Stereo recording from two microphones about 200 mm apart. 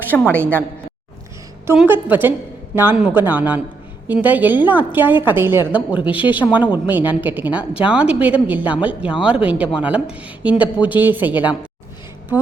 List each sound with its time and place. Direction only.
0.1 s a woman's voice: centre (ahead or behind)
1.6 s a woman's voice: 10° right (ahead or behind)
6.1 s speech: 25° left (ahead or behind)
6.3 s a woman's voice: 10° right (ahead or behind)